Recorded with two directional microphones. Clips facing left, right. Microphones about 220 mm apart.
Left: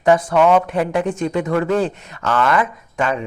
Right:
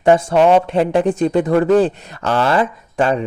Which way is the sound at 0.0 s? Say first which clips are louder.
Right 2 dB; 25° right (ahead or behind).